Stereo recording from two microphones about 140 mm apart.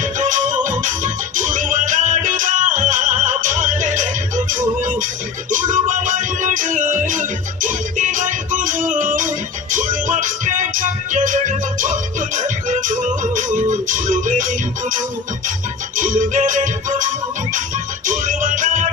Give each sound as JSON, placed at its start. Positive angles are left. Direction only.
{"t": 0.0, "sound": "music", "side_deg": -65}